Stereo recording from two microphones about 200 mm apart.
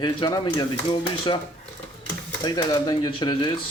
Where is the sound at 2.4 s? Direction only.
20° left (ahead or behind).